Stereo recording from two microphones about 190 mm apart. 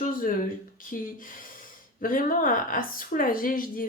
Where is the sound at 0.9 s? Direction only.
45° left (ahead or behind).